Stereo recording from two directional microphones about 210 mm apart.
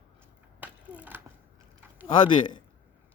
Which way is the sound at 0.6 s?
5° right (ahead or behind).